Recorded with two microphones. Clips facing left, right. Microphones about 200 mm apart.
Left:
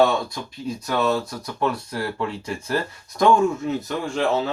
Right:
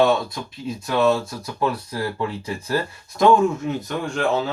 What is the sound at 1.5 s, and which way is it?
Speech, centre (ahead or behind).